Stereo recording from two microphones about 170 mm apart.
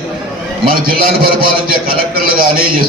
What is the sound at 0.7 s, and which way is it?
A man's voice, 60° right (ahead or behind).